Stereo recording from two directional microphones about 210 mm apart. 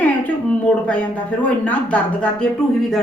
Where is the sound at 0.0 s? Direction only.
5° left (ahead or behind).